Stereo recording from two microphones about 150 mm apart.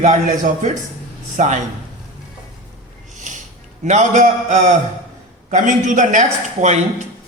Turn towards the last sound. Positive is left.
turn(degrees=-50)  # may be behind; listen again after turning